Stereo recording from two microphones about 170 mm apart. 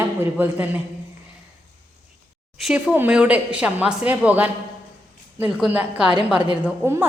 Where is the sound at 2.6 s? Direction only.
5° right (ahead or behind).